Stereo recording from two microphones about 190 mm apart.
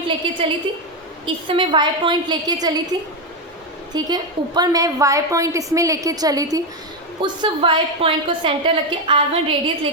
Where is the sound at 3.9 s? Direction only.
20° right (ahead or behind).